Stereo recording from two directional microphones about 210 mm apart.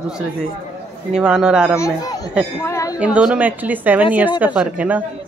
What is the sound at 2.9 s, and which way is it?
Speech, 5° right (ahead or behind).